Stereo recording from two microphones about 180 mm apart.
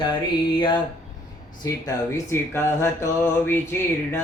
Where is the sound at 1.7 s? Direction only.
15° left (ahead or behind).